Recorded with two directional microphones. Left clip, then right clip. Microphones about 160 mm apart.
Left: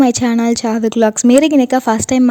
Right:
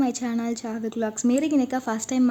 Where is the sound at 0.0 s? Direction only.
65° left (ahead or behind).